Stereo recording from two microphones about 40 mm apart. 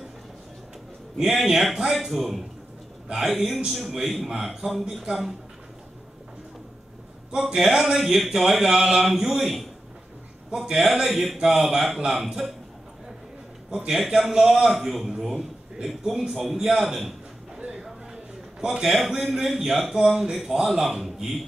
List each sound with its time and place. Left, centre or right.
1.1 s a man's voice: centre
7.2 s a man's voice: centre
13.7 s a man's voice: centre
13.9 s a man's voice: centre
17.7 s a sound: centre
18.9 s a man's voice: centre